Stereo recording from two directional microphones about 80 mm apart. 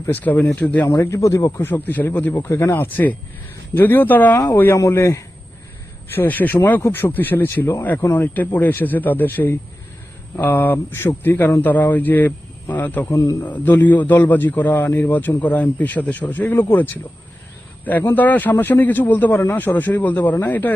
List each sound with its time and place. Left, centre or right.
0.1 s speech: left
0.9 s a man's voice: left
1.7 s a man's voice: left
6.1 s a man's voice: left
13.1 s a man's voice: left
13.4 s a man's voice: left